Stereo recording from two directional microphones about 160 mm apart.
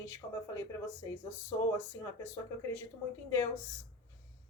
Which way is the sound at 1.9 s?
15° left (ahead or behind).